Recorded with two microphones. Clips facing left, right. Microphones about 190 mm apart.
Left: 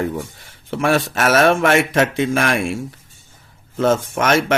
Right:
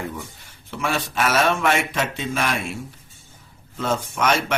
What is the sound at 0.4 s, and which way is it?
Speech, 70° left (ahead or behind).